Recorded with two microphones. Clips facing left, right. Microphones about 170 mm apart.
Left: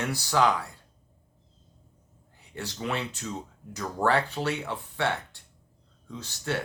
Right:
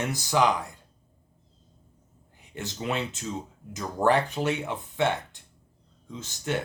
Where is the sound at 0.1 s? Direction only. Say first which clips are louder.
Even; 15° right (ahead or behind).